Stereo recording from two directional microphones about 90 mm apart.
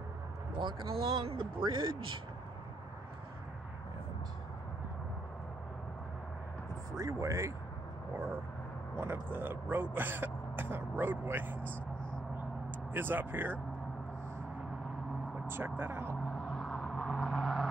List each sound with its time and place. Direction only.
0.6 s speech: 60° right (ahead or behind)
1.1 s speech: 70° right (ahead or behind)
7.0 s speech: 35° right (ahead or behind)
8.9 s speech: 25° right (ahead or behind)
12.9 s speech: 20° right (ahead or behind)
15.4 s speech: 25° right (ahead or behind)
16.3 s vehicle: 10° left (ahead or behind)